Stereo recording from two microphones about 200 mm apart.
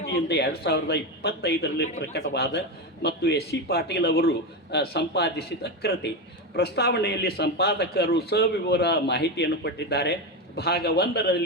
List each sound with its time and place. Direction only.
0.0 s a man's voice: 55° left (ahead or behind)